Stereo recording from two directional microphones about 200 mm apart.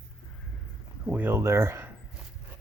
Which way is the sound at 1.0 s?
10° right (ahead or behind).